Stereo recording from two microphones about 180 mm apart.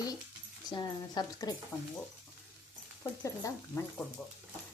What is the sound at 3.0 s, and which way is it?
Speech, 15° left (ahead or behind).